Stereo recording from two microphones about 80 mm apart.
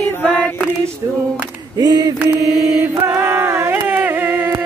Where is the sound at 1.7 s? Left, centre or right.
Right.